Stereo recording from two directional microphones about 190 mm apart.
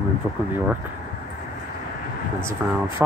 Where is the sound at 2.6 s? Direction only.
10° right (ahead or behind).